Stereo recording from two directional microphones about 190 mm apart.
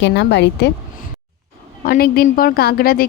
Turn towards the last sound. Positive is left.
turn(degrees=55)  # may be behind; listen again after turning